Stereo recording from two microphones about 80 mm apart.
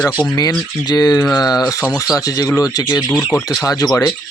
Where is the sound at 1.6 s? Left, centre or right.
Left.